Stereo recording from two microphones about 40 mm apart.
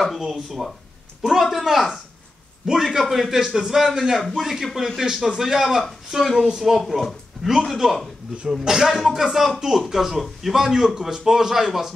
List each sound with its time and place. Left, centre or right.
0.2 s speech: centre
6.4 s speech: centre
6.7 s speech: centre
8.5 s speech: centre